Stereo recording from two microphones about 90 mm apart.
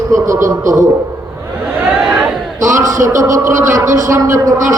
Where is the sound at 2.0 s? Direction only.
10° right (ahead or behind).